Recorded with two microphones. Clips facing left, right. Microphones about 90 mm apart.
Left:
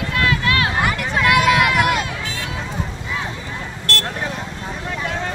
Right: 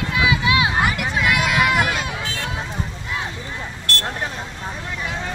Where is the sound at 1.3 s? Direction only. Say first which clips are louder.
Left 5 dB; centre (ahead or behind).